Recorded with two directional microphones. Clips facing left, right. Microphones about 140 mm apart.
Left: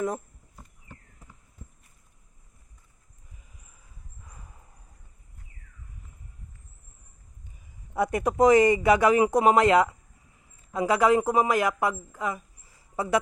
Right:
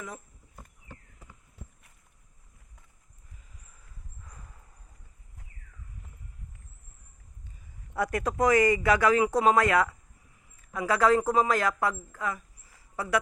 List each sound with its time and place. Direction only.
4.3 s horse: 15° left (ahead or behind)
7.9 s a woman's voice: 20° left (ahead or behind)